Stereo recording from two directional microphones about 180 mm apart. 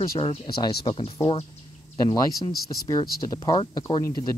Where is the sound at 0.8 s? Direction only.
30° left (ahead or behind).